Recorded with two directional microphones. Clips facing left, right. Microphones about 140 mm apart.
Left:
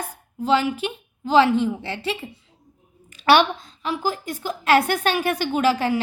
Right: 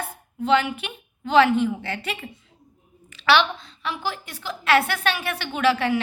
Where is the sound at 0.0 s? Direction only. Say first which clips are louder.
Even; 35° left (ahead or behind).